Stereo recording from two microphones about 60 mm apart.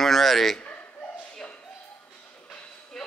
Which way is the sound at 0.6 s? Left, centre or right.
Left.